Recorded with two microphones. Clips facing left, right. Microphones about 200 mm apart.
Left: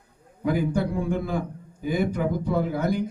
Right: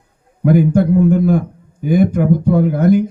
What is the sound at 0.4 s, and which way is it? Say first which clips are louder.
A man's voice: right 11 dB; 50° right (ahead or behind).